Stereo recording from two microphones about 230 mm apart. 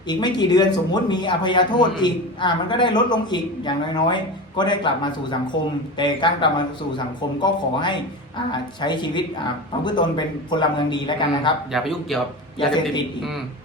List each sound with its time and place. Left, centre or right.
0.1 s a man's voice: centre
11.7 s speech: centre